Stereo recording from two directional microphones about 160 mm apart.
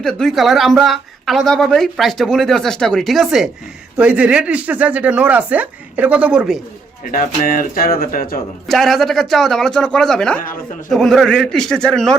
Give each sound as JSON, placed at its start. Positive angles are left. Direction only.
{"t": 0.0, "sound": "speech", "side_deg": 5}
{"t": 7.1, "sound": "speech", "side_deg": 60}
{"t": 8.6, "sound": "speech", "side_deg": 0}